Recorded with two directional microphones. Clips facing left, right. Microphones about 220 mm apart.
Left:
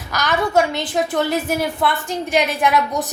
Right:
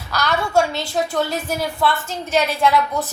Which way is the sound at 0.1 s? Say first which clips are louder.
Left 1 dB; 20° left (ahead or behind).